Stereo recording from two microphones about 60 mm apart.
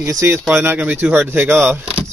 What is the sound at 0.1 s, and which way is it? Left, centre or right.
Speech, right.